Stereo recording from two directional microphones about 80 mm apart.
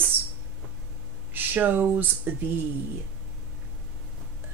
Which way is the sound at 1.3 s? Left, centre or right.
Right.